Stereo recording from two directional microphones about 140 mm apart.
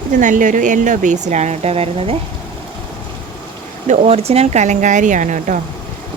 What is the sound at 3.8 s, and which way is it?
Speech, 55° right (ahead or behind).